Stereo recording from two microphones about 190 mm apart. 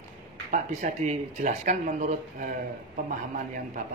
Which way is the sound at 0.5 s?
40° right (ahead or behind).